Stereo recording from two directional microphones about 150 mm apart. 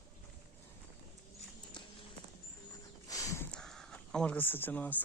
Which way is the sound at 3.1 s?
20° left (ahead or behind).